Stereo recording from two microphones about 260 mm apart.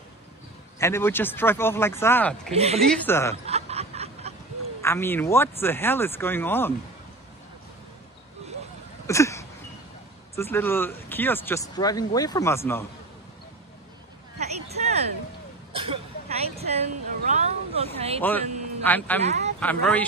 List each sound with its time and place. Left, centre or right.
0.7 s speech: centre
2.5 s speech: right
3.0 s speech: centre
3.4 s snicker: right
4.8 s speech: centre
9.0 s a sound: centre
10.3 s speech: centre
14.4 s a sound: right
15.7 s vehicle: right
16.5 s a sound: right
17.9 s speech: right
18.9 s speech: centre
19.2 s speech: right
19.6 s speech: centre